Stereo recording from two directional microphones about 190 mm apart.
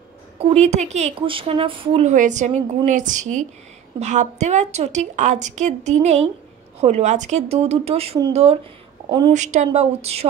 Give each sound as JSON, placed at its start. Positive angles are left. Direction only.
{"t": 0.4, "sound": "a woman's voice", "side_deg": -35}